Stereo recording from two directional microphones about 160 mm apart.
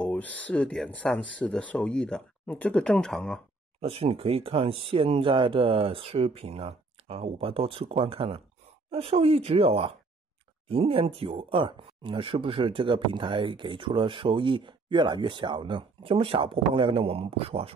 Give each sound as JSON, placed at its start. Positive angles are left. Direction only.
{"t": 0.0, "sound": "speech", "side_deg": 10}
{"t": 3.8, "sound": "speech", "side_deg": -35}